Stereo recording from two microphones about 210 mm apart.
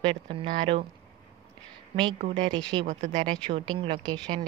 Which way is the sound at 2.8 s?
35° right (ahead or behind).